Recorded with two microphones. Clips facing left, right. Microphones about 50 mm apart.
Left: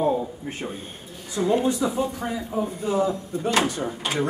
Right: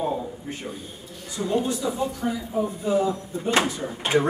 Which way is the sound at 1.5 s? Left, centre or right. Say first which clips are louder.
Left 2 dB; left.